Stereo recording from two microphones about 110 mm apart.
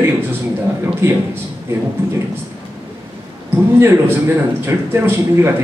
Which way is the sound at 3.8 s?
20° right (ahead or behind).